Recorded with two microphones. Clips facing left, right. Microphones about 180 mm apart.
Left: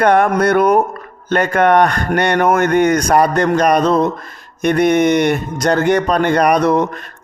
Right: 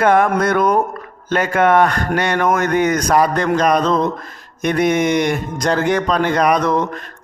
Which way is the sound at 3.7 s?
10° left (ahead or behind).